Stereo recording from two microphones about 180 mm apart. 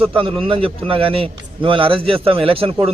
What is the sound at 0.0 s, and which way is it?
A man's voice, 30° right (ahead or behind).